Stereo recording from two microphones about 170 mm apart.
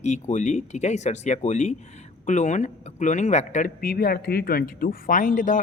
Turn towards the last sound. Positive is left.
turn(degrees=50)  # may be behind; listen again after turning